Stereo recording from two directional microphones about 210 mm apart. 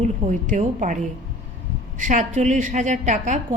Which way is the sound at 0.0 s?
35° right (ahead or behind).